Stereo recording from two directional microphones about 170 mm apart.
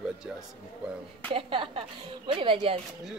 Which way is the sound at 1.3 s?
30° right (ahead or behind).